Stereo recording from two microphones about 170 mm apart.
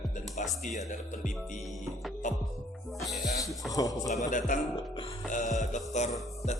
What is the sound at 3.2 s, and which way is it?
Speech, 20° left (ahead or behind).